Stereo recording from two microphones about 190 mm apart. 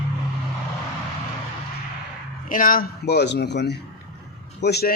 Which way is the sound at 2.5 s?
45° left (ahead or behind).